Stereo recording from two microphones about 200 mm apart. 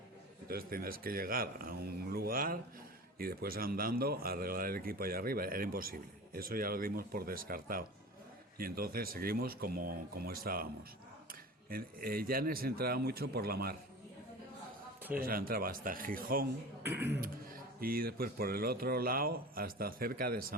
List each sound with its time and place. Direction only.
0.4 s speech: 50° right (ahead or behind)
15.2 s speech: 45° right (ahead or behind)